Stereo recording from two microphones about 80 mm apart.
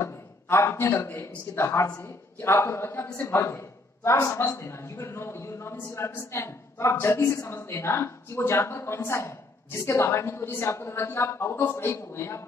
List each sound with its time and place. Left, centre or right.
0.0 s a man's voice: left